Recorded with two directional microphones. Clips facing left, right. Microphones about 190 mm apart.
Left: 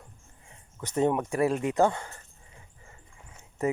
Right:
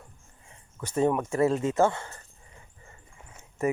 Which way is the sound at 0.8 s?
20° left (ahead or behind).